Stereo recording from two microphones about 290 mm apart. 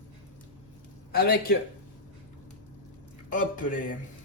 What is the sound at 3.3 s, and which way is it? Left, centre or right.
Speech, left.